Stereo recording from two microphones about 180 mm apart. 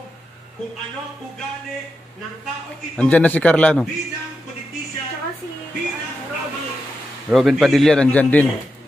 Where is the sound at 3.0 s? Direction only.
10° left (ahead or behind).